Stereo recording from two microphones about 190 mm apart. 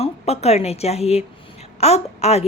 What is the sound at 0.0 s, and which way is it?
A woman's voice, 35° left (ahead or behind).